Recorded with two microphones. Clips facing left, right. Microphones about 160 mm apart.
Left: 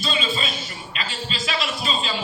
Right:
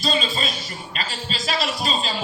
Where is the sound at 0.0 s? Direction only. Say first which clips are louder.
Right 2 dB; 40° right (ahead or behind).